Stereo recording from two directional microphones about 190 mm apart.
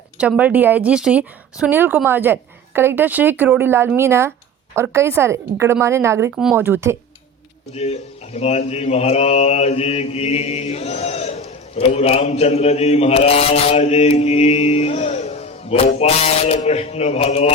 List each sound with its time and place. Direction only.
0.2 s a woman's voice: 5° right (ahead or behind)
7.7 s mantra: 35° left (ahead or behind)